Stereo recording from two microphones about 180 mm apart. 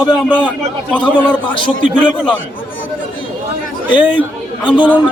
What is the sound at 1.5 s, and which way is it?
Speech, 25° left (ahead or behind).